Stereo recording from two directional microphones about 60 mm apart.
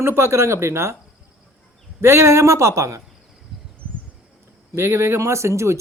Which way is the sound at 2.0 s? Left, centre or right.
Right.